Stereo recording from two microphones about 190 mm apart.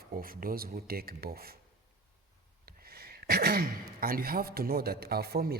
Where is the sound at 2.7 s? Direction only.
55° right (ahead or behind).